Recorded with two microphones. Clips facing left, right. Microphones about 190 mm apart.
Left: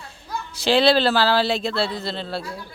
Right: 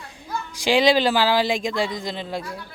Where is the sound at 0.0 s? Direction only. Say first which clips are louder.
Right 1 dB; 15° right (ahead or behind).